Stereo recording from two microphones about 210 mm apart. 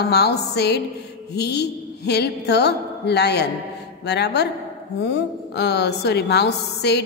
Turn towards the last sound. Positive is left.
turn(degrees=55)  # may be behind; listen again after turning